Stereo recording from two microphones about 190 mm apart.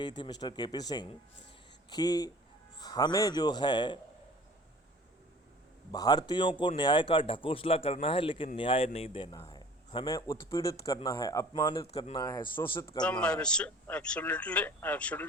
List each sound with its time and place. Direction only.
0.0 s a man's voice: 25° left (ahead or behind)
5.9 s a man's voice: 20° left (ahead or behind)
9.4 s a sound: 20° left (ahead or behind)
10.5 s a man's voice: 20° left (ahead or behind)
13.0 s speech: 5° left (ahead or behind)